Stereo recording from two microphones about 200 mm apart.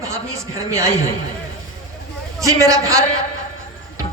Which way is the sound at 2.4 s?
15° right (ahead or behind).